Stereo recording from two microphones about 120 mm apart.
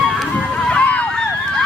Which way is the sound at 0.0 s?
5° left (ahead or behind).